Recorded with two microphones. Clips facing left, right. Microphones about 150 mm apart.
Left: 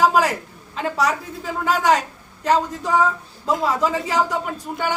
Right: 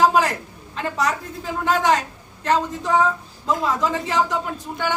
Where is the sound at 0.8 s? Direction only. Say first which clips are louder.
Left 2 dB; 10° left (ahead or behind).